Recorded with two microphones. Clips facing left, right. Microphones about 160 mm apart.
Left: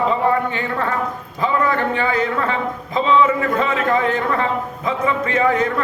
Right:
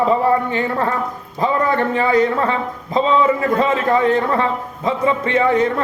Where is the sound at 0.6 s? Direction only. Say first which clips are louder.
Right 2 dB; 35° right (ahead or behind).